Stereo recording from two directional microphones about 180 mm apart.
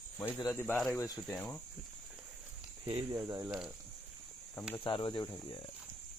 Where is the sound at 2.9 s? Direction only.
30° right (ahead or behind).